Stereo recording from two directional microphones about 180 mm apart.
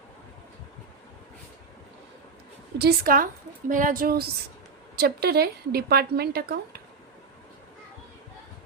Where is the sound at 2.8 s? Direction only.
55° right (ahead or behind).